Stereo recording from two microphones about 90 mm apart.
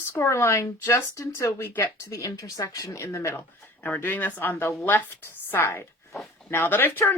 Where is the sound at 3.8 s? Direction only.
20° left (ahead or behind).